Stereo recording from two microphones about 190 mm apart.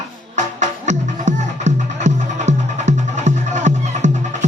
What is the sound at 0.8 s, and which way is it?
Music, 40° right (ahead or behind).